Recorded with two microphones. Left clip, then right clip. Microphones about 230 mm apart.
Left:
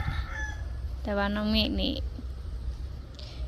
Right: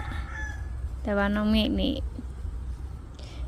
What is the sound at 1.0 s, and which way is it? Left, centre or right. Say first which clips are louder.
A woman's voice: right 3 dB; centre.